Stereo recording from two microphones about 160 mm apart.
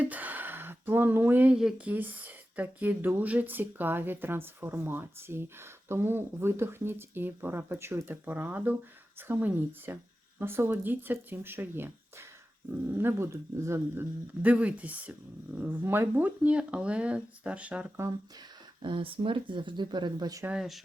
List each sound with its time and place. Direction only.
0.0 s speech: 10° right (ahead or behind)
12.9 s speech: 15° right (ahead or behind)
18.8 s speech: 30° right (ahead or behind)
20.4 s speech: 5° right (ahead or behind)